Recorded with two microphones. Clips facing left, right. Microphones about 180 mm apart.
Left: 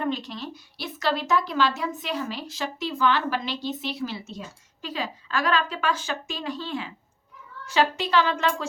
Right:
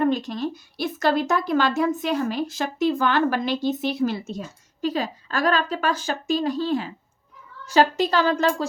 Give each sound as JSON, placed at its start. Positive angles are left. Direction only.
{"t": 0.0, "sound": "a woman's voice", "side_deg": -45}